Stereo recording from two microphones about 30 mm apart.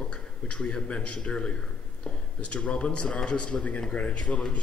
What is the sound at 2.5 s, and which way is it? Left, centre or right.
Speech, left.